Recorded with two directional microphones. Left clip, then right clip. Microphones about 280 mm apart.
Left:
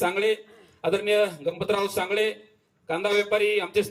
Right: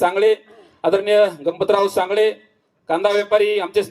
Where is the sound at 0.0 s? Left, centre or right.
Right.